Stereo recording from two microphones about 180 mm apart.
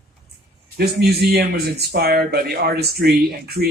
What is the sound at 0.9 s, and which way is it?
Speech, 60° right (ahead or behind).